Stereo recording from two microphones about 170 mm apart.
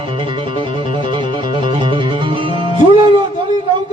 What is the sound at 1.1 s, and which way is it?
Music, 30° right (ahead or behind).